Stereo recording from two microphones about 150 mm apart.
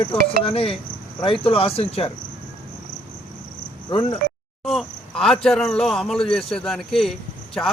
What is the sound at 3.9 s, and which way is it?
Speech, 35° left (ahead or behind).